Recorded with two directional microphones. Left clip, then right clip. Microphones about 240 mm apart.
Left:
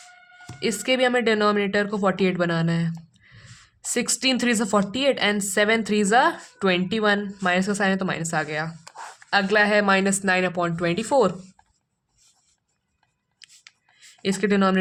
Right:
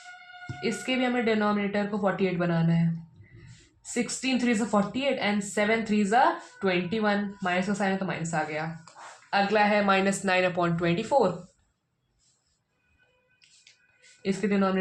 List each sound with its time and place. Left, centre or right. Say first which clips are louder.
0.6 s speech: left 7 dB; left
3.9 s speech: left 6 dB; left
14.2 s speech: left 5 dB; left